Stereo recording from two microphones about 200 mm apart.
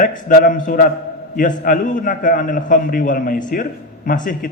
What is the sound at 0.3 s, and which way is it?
A man's voice, 40° left (ahead or behind).